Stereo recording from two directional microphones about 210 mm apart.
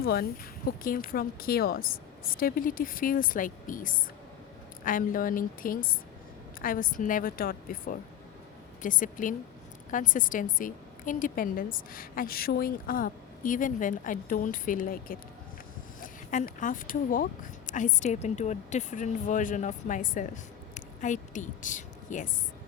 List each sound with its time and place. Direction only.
0.0 s a woman's voice: 45° left (ahead or behind)